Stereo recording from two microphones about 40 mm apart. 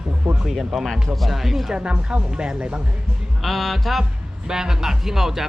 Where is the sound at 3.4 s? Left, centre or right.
Centre.